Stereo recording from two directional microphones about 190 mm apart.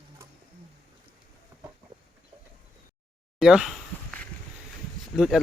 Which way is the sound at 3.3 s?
Centre (ahead or behind).